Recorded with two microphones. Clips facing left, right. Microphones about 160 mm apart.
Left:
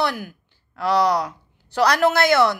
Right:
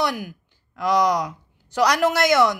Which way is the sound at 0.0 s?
10° right (ahead or behind).